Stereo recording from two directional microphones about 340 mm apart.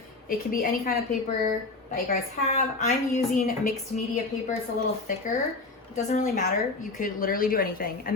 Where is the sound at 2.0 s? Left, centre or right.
Left.